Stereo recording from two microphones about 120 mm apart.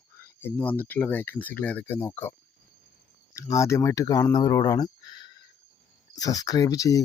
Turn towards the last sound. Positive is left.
turn(degrees=30)  # may be behind; listen again after turning